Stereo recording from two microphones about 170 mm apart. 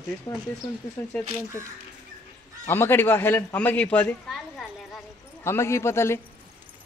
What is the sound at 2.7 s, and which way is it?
Speech, 15° left (ahead or behind).